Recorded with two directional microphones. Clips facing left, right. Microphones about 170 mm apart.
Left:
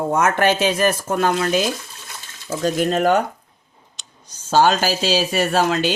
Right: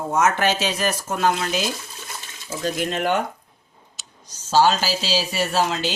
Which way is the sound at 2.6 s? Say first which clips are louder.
Left 6 dB; 45° left (ahead or behind).